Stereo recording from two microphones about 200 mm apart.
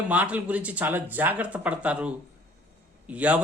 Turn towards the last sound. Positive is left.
turn(degrees=-5)  # may be behind; listen again after turning